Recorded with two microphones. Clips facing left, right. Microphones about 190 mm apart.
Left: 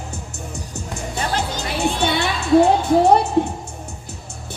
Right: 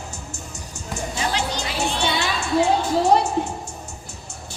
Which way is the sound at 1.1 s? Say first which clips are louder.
Left 2 dB; 50° left (ahead or behind).